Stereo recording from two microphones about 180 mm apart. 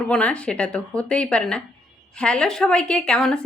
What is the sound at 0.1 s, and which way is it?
A woman's voice, 5° left (ahead or behind).